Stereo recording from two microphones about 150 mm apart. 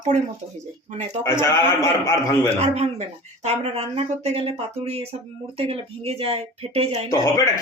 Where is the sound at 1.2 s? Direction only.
20° left (ahead or behind).